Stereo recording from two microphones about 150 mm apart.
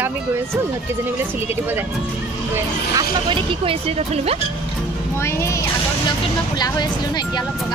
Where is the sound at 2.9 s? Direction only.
35° right (ahead or behind).